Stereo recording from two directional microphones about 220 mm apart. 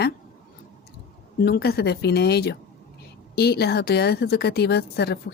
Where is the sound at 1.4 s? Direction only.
45° left (ahead or behind).